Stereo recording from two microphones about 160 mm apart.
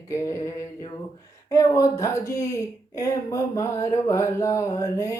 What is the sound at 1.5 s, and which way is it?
Speech, 20° left (ahead or behind).